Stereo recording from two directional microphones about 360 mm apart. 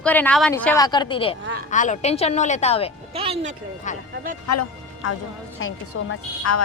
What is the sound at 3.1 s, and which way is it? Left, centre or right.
Speech, centre.